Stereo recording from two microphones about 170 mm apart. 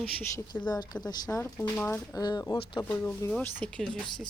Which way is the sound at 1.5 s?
10° left (ahead or behind).